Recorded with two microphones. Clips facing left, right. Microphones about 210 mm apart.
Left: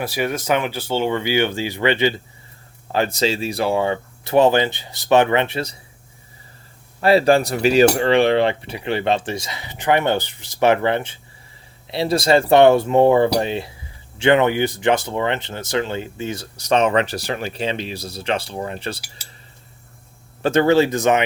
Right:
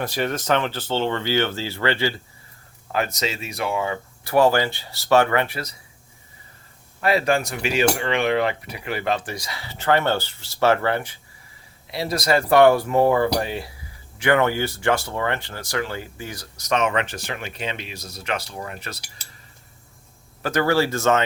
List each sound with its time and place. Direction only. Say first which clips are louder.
0.0 s speech: left 2 dB; 10° left (ahead or behind)
2.9 s speech: left 5 dB; 30° left (ahead or behind)
7.0 s speech: left 6 dB; 30° left (ahead or behind)
20.4 s speech: left 5 dB; 25° left (ahead or behind)